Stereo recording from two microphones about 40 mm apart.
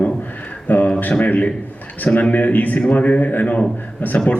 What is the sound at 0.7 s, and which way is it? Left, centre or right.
A man's voice, left.